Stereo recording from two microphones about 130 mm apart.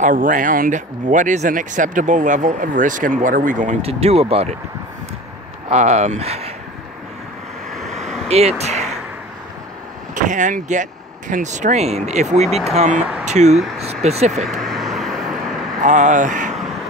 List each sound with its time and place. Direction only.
0.0 s speech: 85° right
3.8 s speech: 50° right (ahead or behind)
5.7 s speech: 60° right (ahead or behind)
7.7 s vehicle: centre (ahead or behind)
8.3 s speech: 55° right (ahead or behind)
10.1 s speech: 70° right (ahead or behind); by 12.9 s 55° right (ahead or behind)
12.9 s speech: 10° right (ahead or behind)
13.2 s a sound: 60° right (ahead or behind)
14.0 s speech: 55° right (ahead or behind)
14.4 s vehicle: centre (ahead or behind)
15.8 s speech: 70° right (ahead or behind)